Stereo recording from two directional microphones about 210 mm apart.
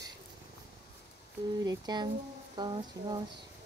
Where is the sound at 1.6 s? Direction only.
20° right (ahead or behind).